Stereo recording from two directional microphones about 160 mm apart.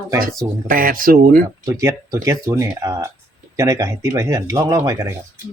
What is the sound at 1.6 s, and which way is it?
Speech, 20° right (ahead or behind).